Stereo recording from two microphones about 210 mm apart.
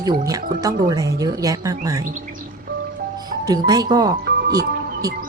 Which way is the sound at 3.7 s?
20° right (ahead or behind).